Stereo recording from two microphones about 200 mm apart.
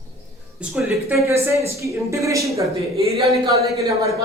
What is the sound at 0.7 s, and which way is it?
Speech, 5° right (ahead or behind).